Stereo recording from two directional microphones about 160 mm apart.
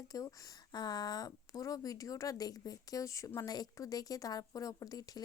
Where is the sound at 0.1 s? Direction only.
20° left (ahead or behind).